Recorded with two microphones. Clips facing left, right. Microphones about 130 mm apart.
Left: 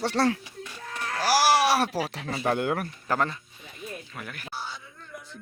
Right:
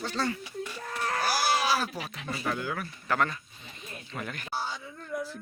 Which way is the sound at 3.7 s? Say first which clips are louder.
Left 1 dB; 5° left (ahead or behind).